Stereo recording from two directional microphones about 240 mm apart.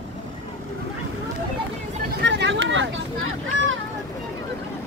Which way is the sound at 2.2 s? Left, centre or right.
Right.